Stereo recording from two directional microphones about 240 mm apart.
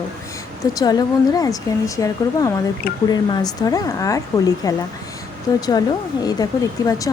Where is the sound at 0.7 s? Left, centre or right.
Centre.